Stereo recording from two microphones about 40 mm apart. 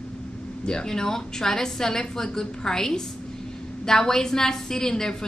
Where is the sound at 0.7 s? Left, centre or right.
Centre.